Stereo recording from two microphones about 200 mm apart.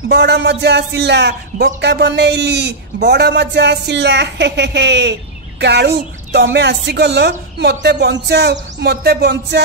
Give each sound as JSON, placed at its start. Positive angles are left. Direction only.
{"t": 0.1, "sound": "speech", "side_deg": -55}